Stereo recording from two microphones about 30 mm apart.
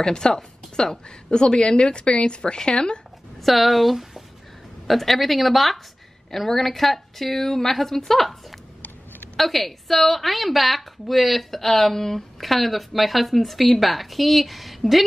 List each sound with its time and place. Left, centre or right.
0.0 s a woman's voice: left
3.3 s a woman's voice: centre
12.4 s a woman's voice: centre